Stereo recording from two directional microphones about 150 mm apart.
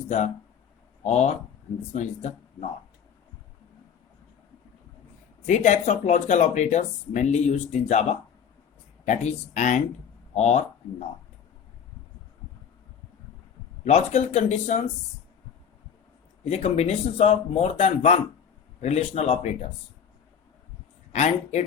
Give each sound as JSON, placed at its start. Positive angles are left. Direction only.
{"t": 1.0, "sound": "speech", "side_deg": 50}
{"t": 5.5, "sound": "speech", "side_deg": 50}
{"t": 9.0, "sound": "speech", "side_deg": 50}
{"t": 13.8, "sound": "speech", "side_deg": 45}
{"t": 16.4, "sound": "speech", "side_deg": 45}
{"t": 21.1, "sound": "speech", "side_deg": 50}